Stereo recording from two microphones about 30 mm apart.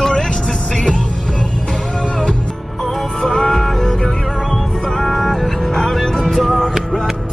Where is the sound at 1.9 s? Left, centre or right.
Left.